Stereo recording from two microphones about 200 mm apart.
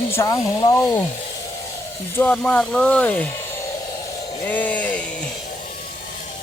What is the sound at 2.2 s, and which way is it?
Speech, 10° left (ahead or behind).